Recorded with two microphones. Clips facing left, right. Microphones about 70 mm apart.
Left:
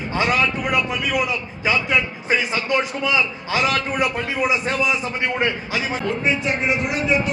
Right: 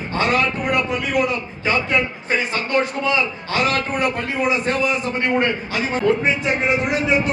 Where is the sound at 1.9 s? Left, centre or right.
Right.